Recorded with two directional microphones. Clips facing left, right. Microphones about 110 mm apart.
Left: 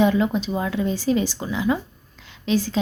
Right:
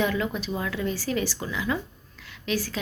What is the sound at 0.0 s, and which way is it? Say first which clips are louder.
A woman's voice: left 7 dB; 20° left (ahead or behind).